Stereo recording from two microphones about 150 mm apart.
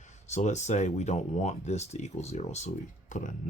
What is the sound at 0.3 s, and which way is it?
Speech, 50° left (ahead or behind).